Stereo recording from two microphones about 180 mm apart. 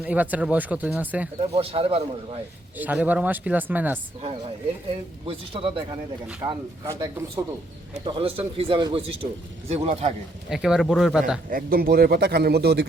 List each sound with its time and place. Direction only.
0.0 s speech: 10° right (ahead or behind)
1.4 s speech: 30° right (ahead or behind)
2.7 s speech: 10° right (ahead or behind)
5.2 s speech: 30° right (ahead or behind)
10.5 s speech: 5° right (ahead or behind)
11.4 s speech: 55° right (ahead or behind)